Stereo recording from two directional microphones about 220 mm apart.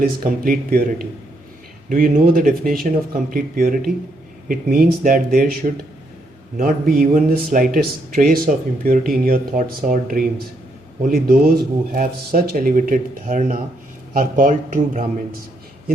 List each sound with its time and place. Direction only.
0.0 s speech: 40° right (ahead or behind)